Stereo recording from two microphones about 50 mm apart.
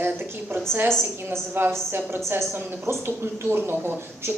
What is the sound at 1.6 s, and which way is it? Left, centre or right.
A woman's voice, right.